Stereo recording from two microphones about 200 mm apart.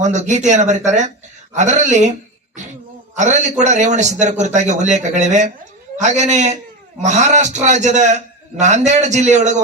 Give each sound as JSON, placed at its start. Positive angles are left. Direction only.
{"t": 0.0, "sound": "a man's voice", "side_deg": -35}
{"t": 3.2, "sound": "a man's voice", "side_deg": -35}